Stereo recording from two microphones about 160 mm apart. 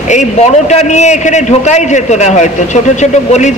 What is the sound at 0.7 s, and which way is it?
Speech, 45° left (ahead or behind).